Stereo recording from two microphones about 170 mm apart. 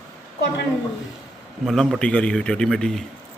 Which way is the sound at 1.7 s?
Centre (ahead or behind).